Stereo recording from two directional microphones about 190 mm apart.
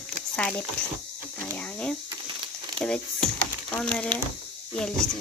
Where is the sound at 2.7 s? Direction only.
5° left (ahead or behind).